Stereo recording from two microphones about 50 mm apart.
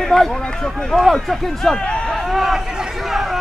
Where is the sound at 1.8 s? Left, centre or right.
Centre.